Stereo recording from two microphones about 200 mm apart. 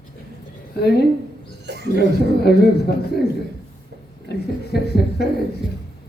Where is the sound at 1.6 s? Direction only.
60° right (ahead or behind).